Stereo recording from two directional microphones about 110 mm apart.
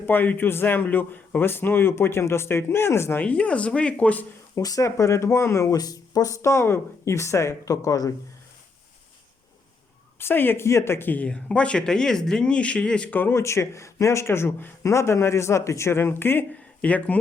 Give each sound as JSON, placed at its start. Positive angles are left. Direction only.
{"t": 0.0, "sound": "speech", "side_deg": 20}
{"t": 4.5, "sound": "speech", "side_deg": 30}
{"t": 10.2, "sound": "speech", "side_deg": 20}